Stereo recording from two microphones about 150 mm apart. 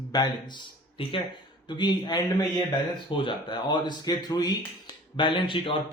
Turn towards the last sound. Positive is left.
turn(degrees=35)  # may be behind; listen again after turning